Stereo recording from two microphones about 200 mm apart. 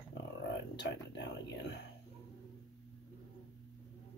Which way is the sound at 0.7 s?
60° left (ahead or behind).